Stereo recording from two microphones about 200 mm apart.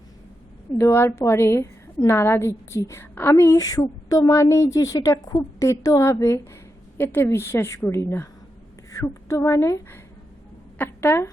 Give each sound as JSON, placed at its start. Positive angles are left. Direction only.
{"t": 0.8, "sound": "a woman's voice", "side_deg": 15}